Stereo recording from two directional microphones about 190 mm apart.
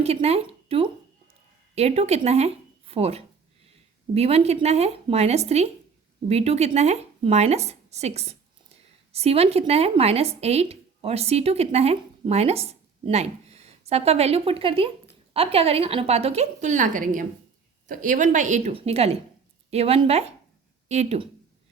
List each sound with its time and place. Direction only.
0.0 s a woman's voice: 35° right (ahead or behind)